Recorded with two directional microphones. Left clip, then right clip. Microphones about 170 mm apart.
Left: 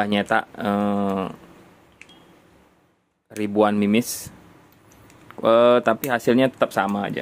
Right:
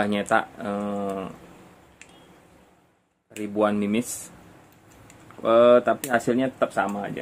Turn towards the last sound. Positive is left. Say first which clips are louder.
# left 3 dB
turn(degrees=70)  # may be behind; listen again after turning